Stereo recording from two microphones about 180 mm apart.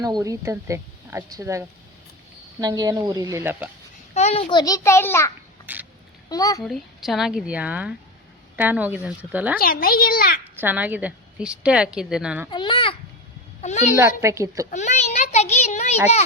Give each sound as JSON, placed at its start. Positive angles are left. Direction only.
{"t": 0.0, "sound": "speech", "side_deg": -20}
{"t": 4.1, "sound": "a child's voice", "side_deg": 35}
{"t": 5.7, "sound": "speech", "side_deg": -10}
{"t": 6.2, "sound": "a child's voice", "side_deg": 20}
{"t": 6.7, "sound": "a woman's voice", "side_deg": 0}
{"t": 9.6, "sound": "a child's voice", "side_deg": 55}
{"t": 10.6, "sound": "a woman's voice", "side_deg": -10}
{"t": 12.5, "sound": "a sound", "side_deg": 25}
{"t": 13.6, "sound": "a child's voice", "side_deg": 40}
{"t": 14.2, "sound": "speech", "side_deg": -15}
{"t": 14.7, "sound": "a sound", "side_deg": 40}